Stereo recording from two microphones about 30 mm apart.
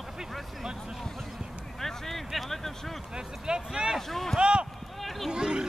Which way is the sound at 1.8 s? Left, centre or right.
Centre.